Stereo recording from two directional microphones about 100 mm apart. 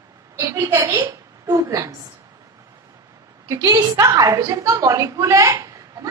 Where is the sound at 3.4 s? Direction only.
40° right (ahead or behind).